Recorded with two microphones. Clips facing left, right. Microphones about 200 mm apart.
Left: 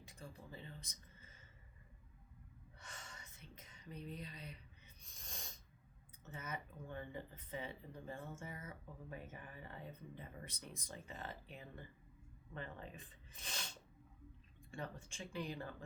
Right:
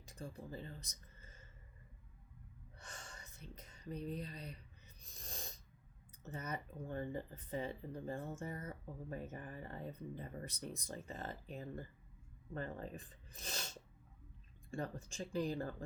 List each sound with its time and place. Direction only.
0.0 s speech: 40° right (ahead or behind)
2.8 s whispering: 40° right (ahead or behind)
5.1 s snort: 40° right (ahead or behind)
6.2 s speech: 40° right (ahead or behind)